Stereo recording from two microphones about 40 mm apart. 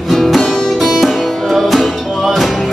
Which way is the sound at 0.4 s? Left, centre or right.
Centre.